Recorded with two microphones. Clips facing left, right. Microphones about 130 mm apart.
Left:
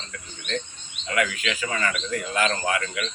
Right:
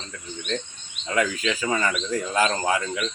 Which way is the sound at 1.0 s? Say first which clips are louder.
Right 2 dB; 30° right (ahead or behind).